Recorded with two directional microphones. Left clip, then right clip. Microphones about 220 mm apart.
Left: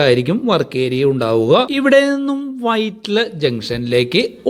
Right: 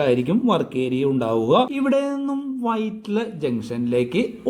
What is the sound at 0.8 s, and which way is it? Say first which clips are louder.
Speech: left 6 dB; 70° left (ahead or behind).